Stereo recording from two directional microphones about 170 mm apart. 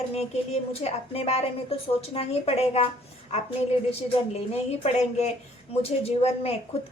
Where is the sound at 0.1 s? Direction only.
40° left (ahead or behind).